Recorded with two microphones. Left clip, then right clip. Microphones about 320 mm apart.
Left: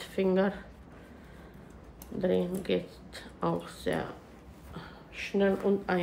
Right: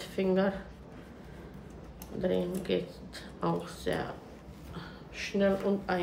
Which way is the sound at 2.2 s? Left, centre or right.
Centre.